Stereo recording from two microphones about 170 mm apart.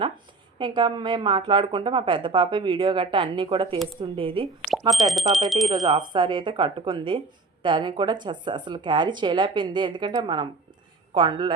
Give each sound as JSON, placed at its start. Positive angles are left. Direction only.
{"t": 0.6, "sound": "a woman's voice", "side_deg": -30}
{"t": 4.9, "sound": "speech", "side_deg": 0}
{"t": 5.6, "sound": "a woman's voice", "side_deg": -25}